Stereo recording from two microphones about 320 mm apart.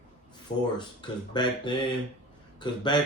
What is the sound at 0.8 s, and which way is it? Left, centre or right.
Speech, centre.